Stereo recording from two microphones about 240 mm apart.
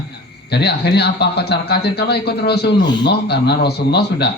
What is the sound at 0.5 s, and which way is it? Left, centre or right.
Speech, left.